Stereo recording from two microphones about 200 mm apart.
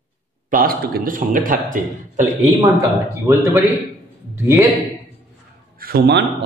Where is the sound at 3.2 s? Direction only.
15° right (ahead or behind).